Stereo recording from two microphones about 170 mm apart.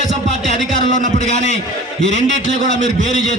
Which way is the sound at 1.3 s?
40° right (ahead or behind).